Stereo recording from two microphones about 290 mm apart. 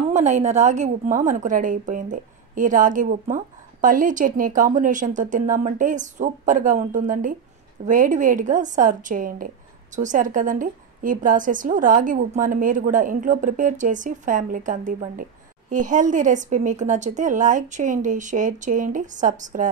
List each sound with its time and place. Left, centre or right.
0.1 s a woman's voice: right